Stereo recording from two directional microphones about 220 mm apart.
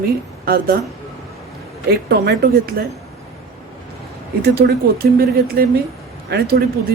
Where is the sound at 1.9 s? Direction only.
45° right (ahead or behind).